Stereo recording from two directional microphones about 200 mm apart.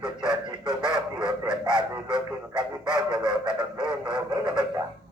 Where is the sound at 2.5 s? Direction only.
5° right (ahead or behind).